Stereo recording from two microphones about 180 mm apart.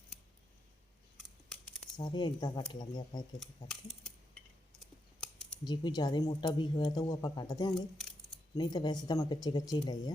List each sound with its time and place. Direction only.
1.1 s computer keyboard: centre (ahead or behind)
2.0 s speech: 25° left (ahead or behind)
3.4 s speech: 5° left (ahead or behind)
4.8 s scissors: 5° left (ahead or behind)
5.6 s speech: 25° left (ahead or behind)
7.8 s keys jangling: centre (ahead or behind)
8.5 s speech: 25° left (ahead or behind)